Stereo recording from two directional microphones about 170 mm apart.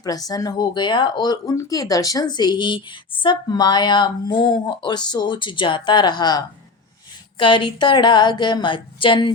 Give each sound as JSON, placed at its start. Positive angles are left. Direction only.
{"t": 0.0, "sound": "speech", "side_deg": 20}